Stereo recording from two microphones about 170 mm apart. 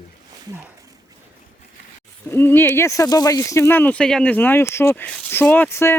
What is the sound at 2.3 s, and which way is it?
Speech, 10° left (ahead or behind).